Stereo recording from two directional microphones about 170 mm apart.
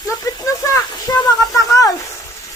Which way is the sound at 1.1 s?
20° left (ahead or behind).